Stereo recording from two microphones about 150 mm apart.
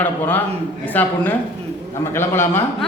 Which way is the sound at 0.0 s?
10° left (ahead or behind).